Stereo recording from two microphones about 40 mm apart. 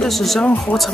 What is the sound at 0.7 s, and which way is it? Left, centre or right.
Music, left.